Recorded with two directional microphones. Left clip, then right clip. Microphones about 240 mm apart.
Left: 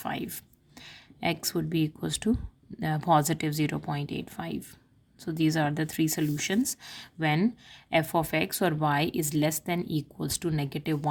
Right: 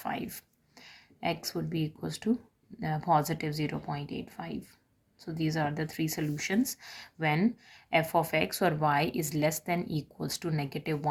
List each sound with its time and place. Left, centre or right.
0.0 s speech: left